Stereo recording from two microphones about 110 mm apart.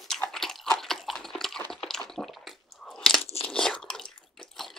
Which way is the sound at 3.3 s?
65° left (ahead or behind).